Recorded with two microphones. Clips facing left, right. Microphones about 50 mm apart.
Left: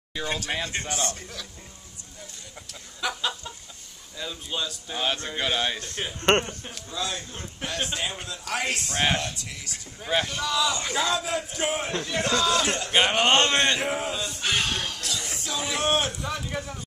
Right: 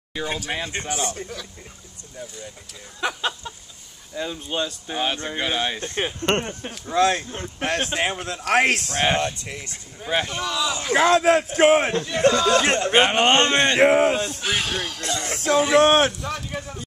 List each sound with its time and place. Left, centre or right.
0.1 s speech: centre
3.0 s speech: right; by 5.8 s centre
5.8 s speech: right
6.9 s a man's voice: right
9.1 s speech: right
10.5 s speech: centre
10.9 s a man's voice: right
12.2 s speech: right
12.9 s speech: right
13.7 s a man's voice: right
14.4 s speech: centre
15.2 s a man's voice: right
16.2 s speech: centre